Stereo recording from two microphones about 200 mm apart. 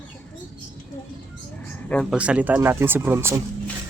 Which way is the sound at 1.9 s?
5° left (ahead or behind).